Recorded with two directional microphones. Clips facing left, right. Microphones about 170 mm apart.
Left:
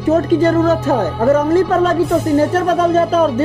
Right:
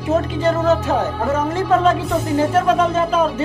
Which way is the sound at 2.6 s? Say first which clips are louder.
Left 3 dB; 40° left (ahead or behind).